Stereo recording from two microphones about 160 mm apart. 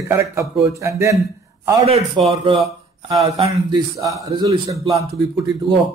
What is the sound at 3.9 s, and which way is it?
A man's voice, 20° right (ahead or behind).